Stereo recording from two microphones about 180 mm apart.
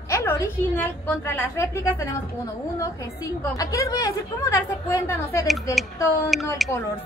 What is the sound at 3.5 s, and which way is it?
Speech, 20° left (ahead or behind).